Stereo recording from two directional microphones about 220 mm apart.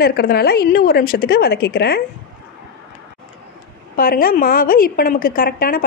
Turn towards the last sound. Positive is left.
turn(degrees=40)  # may be behind; listen again after turning